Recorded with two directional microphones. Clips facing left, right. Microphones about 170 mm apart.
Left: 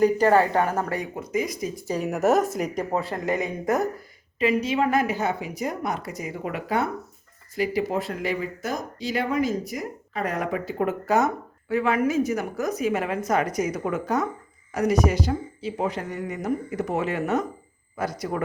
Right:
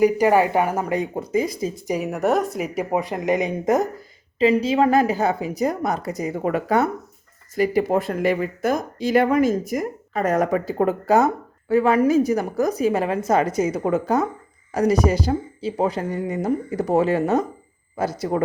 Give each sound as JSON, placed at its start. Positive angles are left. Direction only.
{"t": 0.0, "sound": "a woman's voice", "side_deg": -15}
{"t": 1.1, "sound": "speech", "side_deg": -30}
{"t": 2.0, "sound": "speech", "side_deg": 0}
{"t": 2.9, "sound": "a woman's voice", "side_deg": -15}
{"t": 4.4, "sound": "speech", "side_deg": -30}